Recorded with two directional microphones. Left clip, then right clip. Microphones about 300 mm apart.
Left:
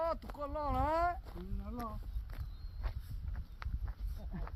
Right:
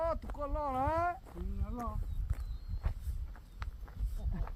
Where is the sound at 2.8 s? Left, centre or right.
Left.